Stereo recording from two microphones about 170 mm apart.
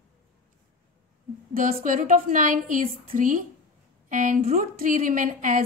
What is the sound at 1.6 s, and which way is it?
A woman's voice, 55° right (ahead or behind).